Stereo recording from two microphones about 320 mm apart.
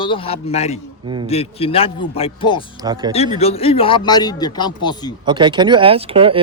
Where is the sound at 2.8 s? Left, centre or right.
Centre.